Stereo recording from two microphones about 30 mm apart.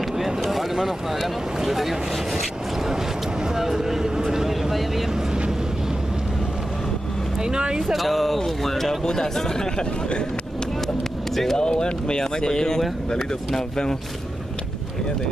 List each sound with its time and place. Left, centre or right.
0.0 s a sound: centre
7.3 s speech: right
7.8 s speech: centre
11.5 s speech: left